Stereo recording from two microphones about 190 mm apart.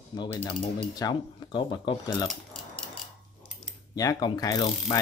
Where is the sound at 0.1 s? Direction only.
25° left (ahead or behind).